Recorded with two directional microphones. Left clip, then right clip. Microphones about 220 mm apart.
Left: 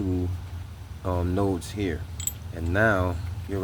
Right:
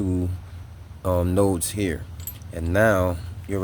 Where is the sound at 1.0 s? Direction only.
50° right (ahead or behind).